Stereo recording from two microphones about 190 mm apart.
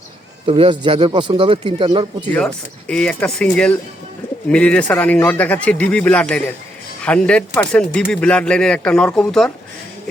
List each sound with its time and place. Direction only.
0.4 s speech: 30° right (ahead or behind)
2.3 s speech: 5° left (ahead or behind)